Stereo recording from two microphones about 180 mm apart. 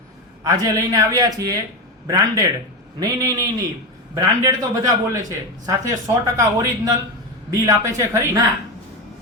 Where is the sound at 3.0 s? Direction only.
20° right (ahead or behind).